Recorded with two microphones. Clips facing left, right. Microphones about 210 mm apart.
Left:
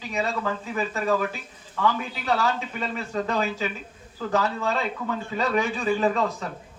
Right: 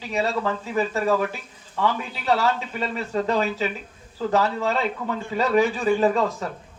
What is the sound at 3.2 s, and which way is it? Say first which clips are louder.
Speech: right 3 dB; 35° right (ahead or behind).